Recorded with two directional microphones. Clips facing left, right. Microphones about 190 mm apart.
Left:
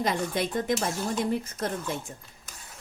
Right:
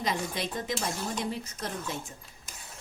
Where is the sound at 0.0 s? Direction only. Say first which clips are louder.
Left 4 dB; 50° left (ahead or behind).